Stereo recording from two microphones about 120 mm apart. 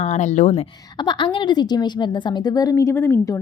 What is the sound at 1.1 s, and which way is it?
A woman's voice, 40° left (ahead or behind).